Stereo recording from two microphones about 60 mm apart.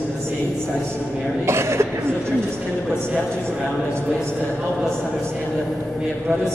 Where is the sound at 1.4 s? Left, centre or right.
Right.